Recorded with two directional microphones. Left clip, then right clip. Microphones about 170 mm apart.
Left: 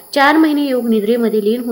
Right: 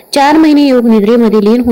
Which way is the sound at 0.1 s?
40° right (ahead or behind).